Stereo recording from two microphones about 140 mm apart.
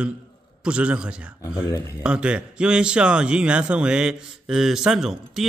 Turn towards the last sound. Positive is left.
turn(degrees=-5)  # may be behind; listen again after turning